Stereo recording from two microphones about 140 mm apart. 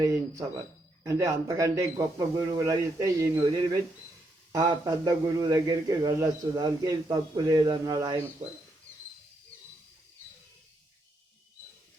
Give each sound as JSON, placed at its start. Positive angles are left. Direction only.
{"t": 0.0, "sound": "a man's voice", "side_deg": -20}